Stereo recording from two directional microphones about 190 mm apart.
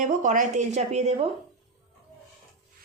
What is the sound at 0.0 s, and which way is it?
A woman's voice, 40° right (ahead or behind).